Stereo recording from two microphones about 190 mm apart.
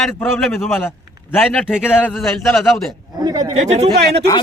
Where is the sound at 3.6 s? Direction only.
35° right (ahead or behind).